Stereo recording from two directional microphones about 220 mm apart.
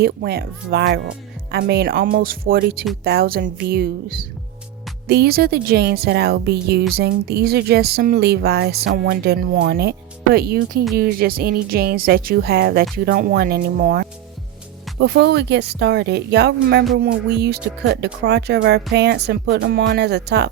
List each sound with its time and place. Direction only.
0.0 s speech: 45° right (ahead or behind)